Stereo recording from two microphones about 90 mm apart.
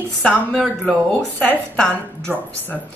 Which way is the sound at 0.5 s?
5° right (ahead or behind).